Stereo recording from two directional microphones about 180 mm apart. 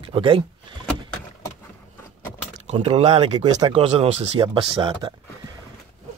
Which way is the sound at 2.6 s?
35° right (ahead or behind).